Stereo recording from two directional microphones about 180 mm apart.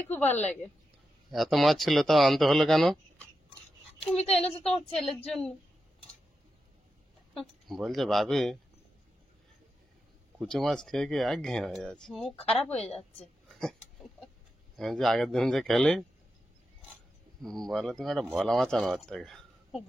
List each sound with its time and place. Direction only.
0.1 s a woman's voice: 10° left (ahead or behind)
1.3 s speech: centre (ahead or behind)
4.4 s a woman's voice: 35° left (ahead or behind)
4.9 s speech: 5° left (ahead or behind)
7.3 s speech: centre (ahead or behind)
10.4 s speech: centre (ahead or behind)
12.7 s a woman's voice: 35° left (ahead or behind)
14.8 s speech: centre (ahead or behind)
17.4 s a man's voice: centre (ahead or behind)